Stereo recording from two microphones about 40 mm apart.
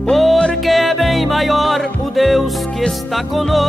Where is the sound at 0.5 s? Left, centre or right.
Centre.